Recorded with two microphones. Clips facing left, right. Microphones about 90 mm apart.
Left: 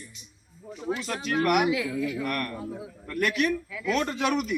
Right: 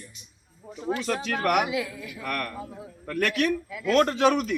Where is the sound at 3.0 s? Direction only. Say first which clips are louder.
Right 1 dB; 65° right (ahead or behind).